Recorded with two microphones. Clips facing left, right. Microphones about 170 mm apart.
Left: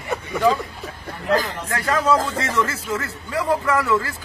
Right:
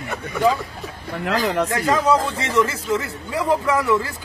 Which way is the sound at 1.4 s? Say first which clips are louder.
Right 11 dB; 65° right (ahead or behind).